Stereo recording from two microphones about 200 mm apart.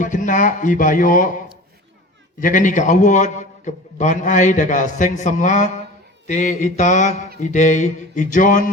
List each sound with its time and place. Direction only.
0.0 s a man's voice: 40° left (ahead or behind)
2.4 s a man's voice: 40° left (ahead or behind)